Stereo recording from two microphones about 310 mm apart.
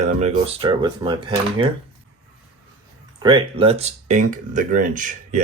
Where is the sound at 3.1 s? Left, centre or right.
Centre.